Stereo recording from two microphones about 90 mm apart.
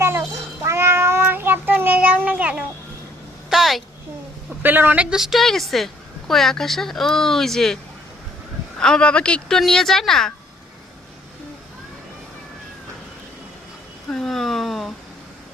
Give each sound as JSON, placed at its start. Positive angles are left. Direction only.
{"t": 0.0, "sound": "meow", "side_deg": -30}
{"t": 3.5, "sound": "a sound", "side_deg": 0}
{"t": 4.6, "sound": "a woman's voice", "side_deg": -20}
{"t": 5.1, "sound": "a woman's voice", "side_deg": -5}
{"t": 8.8, "sound": "a woman's voice", "side_deg": 10}
{"t": 14.1, "sound": "a sound", "side_deg": 5}